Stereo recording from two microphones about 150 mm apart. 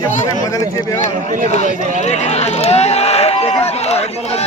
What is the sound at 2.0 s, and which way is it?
Run, 50° left (ahead or behind).